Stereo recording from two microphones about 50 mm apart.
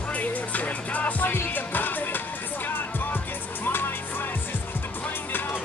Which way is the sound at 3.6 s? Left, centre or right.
Left.